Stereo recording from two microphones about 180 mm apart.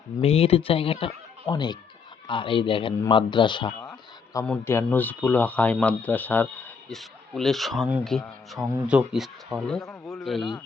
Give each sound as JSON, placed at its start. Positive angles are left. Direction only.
{"t": 0.2, "sound": "speech", "side_deg": 35}
{"t": 4.4, "sound": "a man's voice", "side_deg": 15}